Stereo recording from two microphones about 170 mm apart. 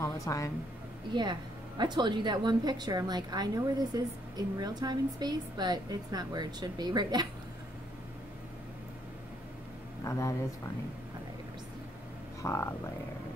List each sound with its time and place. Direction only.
0.0 s speech: 20° left (ahead or behind)
1.1 s a woman's voice: 25° right (ahead or behind)
10.0 s speech: 20° left (ahead or behind)
12.4 s speech: 15° left (ahead or behind)